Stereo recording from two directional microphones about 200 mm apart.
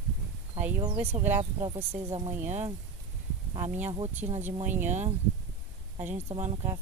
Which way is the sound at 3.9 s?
30° right (ahead or behind).